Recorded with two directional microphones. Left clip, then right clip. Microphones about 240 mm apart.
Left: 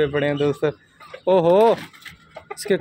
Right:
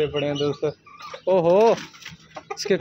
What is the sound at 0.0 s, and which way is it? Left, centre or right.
Speech, centre.